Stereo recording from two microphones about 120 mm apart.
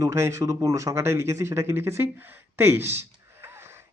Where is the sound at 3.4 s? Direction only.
20° right (ahead or behind).